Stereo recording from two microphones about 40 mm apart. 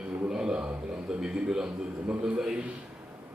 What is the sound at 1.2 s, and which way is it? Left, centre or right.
Mantra, centre.